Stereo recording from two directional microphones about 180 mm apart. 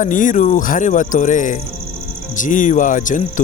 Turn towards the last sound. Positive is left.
turn(degrees=45)  # may be behind; listen again after turning